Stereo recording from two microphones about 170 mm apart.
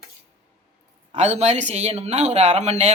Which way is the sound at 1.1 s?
40° right (ahead or behind).